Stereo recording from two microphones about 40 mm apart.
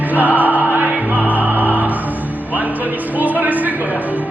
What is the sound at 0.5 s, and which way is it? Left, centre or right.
Music, right.